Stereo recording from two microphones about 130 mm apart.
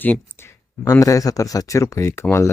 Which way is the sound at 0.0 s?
15° left (ahead or behind).